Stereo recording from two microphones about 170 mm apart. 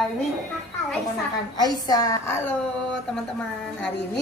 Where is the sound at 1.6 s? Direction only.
20° left (ahead or behind).